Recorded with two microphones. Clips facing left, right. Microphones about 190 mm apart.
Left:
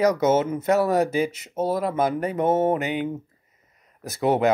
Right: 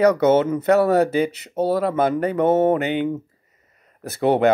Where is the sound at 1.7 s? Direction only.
70° right (ahead or behind).